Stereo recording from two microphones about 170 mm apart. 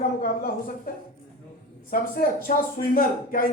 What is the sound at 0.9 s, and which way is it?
Speech, 55° left (ahead or behind).